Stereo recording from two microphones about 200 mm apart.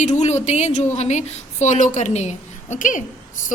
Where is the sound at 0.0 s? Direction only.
35° left (ahead or behind).